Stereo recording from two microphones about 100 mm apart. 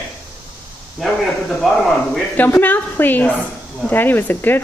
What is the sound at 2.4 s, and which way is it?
A woman's voice, 20° left (ahead or behind).